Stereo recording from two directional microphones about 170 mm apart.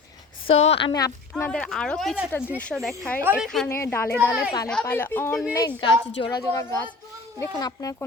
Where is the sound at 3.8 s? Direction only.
15° left (ahead or behind).